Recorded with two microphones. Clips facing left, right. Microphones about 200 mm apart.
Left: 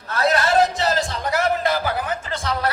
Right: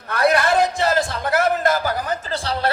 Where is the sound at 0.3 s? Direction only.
55° right (ahead or behind).